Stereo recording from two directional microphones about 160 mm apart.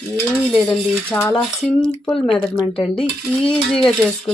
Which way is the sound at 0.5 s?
5° left (ahead or behind).